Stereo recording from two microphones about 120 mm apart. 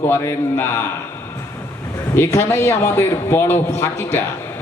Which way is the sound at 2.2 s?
20° left (ahead or behind).